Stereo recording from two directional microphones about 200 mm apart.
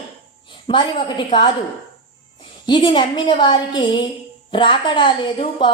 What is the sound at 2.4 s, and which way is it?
A woman's voice, 25° left (ahead or behind).